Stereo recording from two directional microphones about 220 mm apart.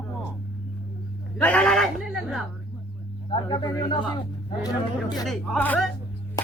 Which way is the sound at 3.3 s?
20° left (ahead or behind).